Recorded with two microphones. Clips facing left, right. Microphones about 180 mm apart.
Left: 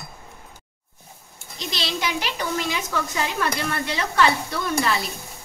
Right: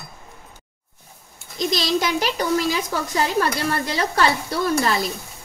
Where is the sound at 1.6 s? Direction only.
40° right (ahead or behind).